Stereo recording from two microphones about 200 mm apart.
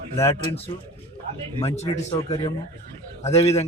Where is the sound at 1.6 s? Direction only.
30° left (ahead or behind).